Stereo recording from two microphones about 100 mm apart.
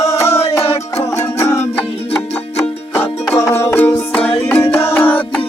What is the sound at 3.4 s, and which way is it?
Music, 30° left (ahead or behind).